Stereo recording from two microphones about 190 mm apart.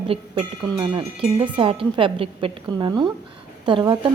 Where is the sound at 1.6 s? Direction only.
30° right (ahead or behind).